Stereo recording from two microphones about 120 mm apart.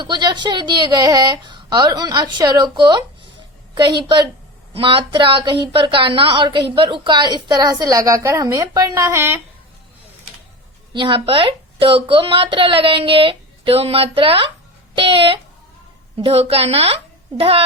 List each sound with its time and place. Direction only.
0.0 s a woman's voice: 35° right (ahead or behind); by 9.4 s 20° right (ahead or behind)
10.9 s a woman's voice: 45° right (ahead or behind)